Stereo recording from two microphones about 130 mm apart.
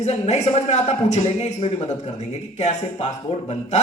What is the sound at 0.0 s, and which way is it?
A man's voice, 60° left (ahead or behind).